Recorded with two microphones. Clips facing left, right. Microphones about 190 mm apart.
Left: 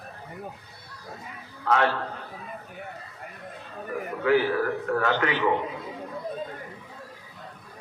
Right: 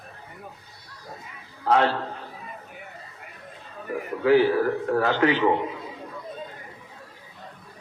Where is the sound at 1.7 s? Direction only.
35° right (ahead or behind).